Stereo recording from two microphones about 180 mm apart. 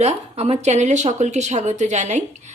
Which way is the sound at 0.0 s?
35° right (ahead or behind).